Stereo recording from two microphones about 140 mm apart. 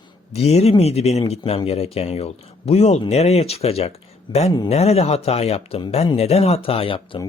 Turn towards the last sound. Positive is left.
turn(degrees=40)  # may be behind; listen again after turning